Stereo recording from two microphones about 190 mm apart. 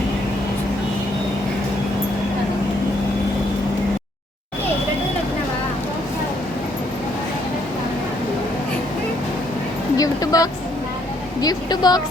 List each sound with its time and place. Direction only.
10.0 s music: 20° left (ahead or behind)
11.3 s speech: 20° left (ahead or behind)